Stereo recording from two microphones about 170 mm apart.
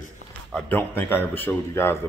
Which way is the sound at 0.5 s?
5° left (ahead or behind).